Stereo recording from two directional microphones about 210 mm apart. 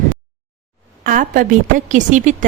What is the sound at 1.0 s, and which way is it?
A woman's voice, 40° right (ahead or behind).